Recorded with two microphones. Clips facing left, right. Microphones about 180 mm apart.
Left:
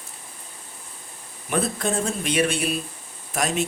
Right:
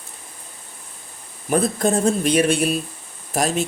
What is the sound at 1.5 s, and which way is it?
Speech, 40° right (ahead or behind).